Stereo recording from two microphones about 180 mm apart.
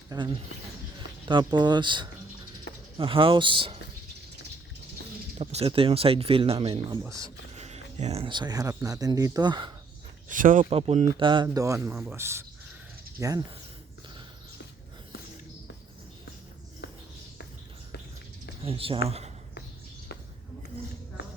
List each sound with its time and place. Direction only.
0.1 s speech: 20° right (ahead or behind)
1.3 s speech: 25° right (ahead or behind)
5.4 s speech: 35° right (ahead or behind)
7.0 s speech: 15° right (ahead or behind)
7.5 s speech: 35° right (ahead or behind)
10.2 s speech: 45° right (ahead or behind)
10.7 s speech: 30° right (ahead or behind)
11.4 s speech: 15° right (ahead or behind)
18.6 s speech: 30° right (ahead or behind)